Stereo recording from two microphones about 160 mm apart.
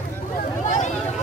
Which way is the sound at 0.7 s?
50° left (ahead or behind).